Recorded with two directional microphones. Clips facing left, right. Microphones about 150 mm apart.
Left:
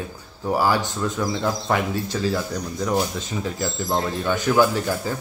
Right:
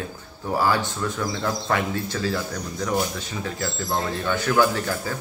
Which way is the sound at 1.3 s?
15° left (ahead or behind).